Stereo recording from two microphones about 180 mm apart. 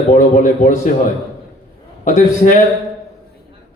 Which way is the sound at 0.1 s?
45° left (ahead or behind).